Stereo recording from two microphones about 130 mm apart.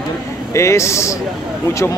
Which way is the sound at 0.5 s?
20° left (ahead or behind).